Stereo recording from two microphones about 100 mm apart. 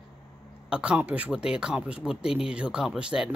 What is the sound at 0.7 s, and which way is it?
Speech, 10° right (ahead or behind).